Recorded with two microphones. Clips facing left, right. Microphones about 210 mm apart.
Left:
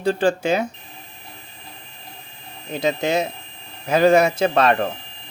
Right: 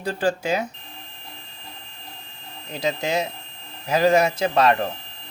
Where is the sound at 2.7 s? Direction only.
25° left (ahead or behind).